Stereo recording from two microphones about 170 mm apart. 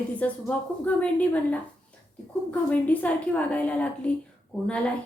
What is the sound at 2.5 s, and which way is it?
A woman's voice, 10° left (ahead or behind).